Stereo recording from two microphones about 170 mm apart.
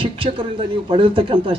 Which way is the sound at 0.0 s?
30° right (ahead or behind).